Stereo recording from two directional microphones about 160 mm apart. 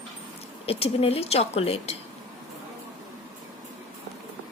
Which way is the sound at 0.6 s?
40° left (ahead or behind).